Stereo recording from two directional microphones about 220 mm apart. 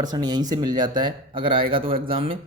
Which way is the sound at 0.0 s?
20° right (ahead or behind).